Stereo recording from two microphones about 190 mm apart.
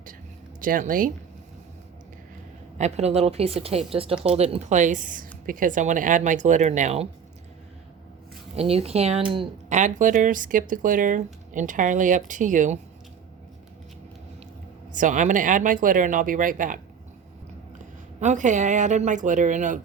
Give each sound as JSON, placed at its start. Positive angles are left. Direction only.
{"t": 0.6, "sound": "speech", "side_deg": -45}
{"t": 2.7, "sound": "a woman's voice", "side_deg": -35}
{"t": 8.5, "sound": "a woman's voice", "side_deg": -30}
{"t": 14.9, "sound": "speech", "side_deg": -40}
{"t": 18.2, "sound": "a woman's voice", "side_deg": -40}